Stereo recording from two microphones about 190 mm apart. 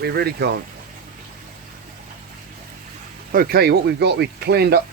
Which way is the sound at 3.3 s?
55° right (ahead or behind).